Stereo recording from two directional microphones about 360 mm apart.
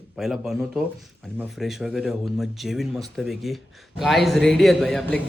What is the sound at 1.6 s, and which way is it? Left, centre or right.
A man's voice, centre.